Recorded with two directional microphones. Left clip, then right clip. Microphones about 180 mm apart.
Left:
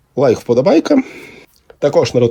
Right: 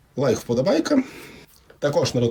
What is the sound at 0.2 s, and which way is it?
Speech, 15° left (ahead or behind).